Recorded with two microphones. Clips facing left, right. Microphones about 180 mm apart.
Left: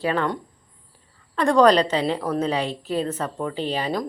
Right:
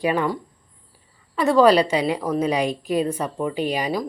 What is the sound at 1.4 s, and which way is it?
A woman's voice, 5° right (ahead or behind).